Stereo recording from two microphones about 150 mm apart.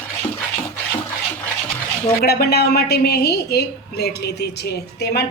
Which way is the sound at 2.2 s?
90° left.